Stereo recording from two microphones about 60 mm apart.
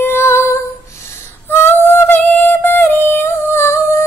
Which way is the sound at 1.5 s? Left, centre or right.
Left.